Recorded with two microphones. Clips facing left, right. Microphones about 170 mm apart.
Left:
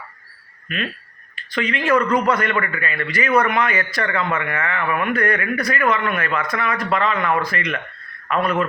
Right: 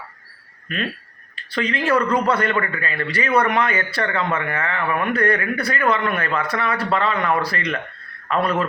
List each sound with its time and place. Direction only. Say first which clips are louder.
1.5 s a man's voice: left 1 dB; 35° right (ahead or behind)